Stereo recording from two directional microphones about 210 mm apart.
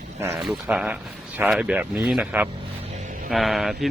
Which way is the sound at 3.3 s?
Centre (ahead or behind).